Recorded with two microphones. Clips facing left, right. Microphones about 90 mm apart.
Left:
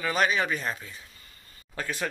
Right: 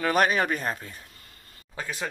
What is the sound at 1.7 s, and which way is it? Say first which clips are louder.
Speech: left 1 dB; 20° right (ahead or behind).